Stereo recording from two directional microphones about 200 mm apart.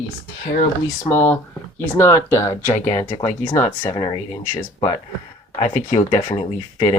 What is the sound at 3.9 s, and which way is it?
Speech, 20° left (ahead or behind).